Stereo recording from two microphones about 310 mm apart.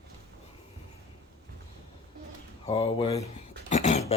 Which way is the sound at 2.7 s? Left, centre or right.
Centre.